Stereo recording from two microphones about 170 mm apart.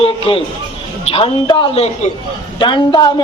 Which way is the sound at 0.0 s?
35° left (ahead or behind).